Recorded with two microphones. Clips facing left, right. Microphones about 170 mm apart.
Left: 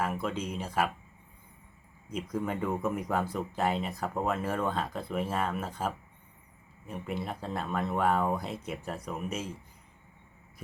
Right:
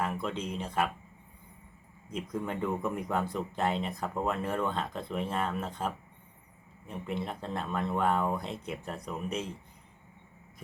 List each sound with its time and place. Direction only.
0.0 s speech: 5° left (ahead or behind)
2.0 s speech: 5° left (ahead or behind)